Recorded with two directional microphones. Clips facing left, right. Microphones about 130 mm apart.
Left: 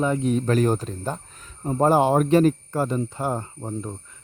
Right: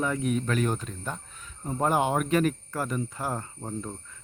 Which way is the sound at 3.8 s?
15° left (ahead or behind).